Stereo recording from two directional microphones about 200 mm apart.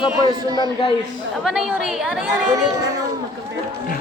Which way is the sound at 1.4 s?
Centre (ahead or behind).